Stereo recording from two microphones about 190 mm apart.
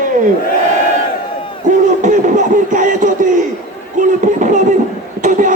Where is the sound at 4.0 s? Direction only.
40° right (ahead or behind).